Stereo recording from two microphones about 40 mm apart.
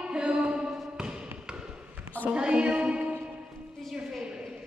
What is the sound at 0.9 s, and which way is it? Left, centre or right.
Basketball bounce, right.